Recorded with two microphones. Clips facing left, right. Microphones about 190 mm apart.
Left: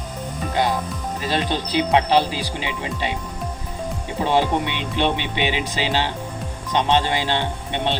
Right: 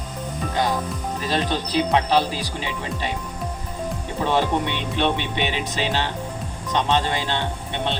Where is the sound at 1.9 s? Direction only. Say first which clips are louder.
Left 3 dB; 15° left (ahead or behind).